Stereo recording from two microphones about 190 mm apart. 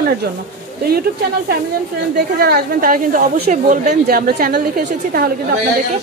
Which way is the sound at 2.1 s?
55° right (ahead or behind).